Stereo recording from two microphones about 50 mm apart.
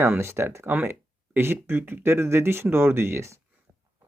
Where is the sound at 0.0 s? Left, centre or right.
Right.